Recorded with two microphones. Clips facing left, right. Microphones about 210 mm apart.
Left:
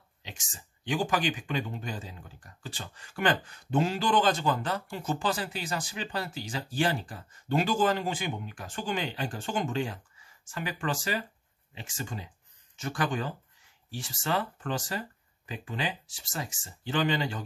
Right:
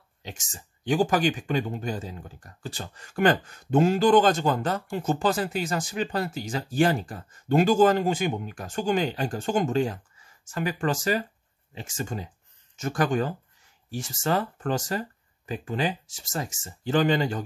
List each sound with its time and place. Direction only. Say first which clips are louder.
0.2 s speech: right 6 dB; 45° right (ahead or behind)